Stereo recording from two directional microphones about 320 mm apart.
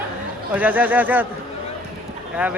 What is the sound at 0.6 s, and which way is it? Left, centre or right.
Speech, centre.